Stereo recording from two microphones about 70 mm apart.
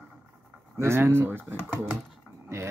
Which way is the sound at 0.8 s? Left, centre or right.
Right.